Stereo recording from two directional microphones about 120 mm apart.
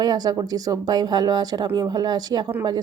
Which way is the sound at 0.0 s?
35° right (ahead or behind).